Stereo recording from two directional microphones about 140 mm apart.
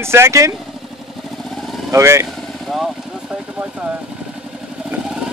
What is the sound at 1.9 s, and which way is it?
Speech, 20° right (ahead or behind).